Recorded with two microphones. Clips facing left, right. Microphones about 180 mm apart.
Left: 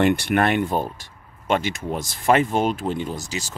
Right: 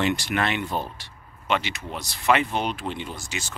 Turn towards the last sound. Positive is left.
turn(degrees=35)  # may be behind; listen again after turning